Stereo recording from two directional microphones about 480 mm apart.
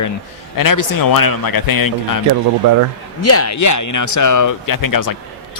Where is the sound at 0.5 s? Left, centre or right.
Left.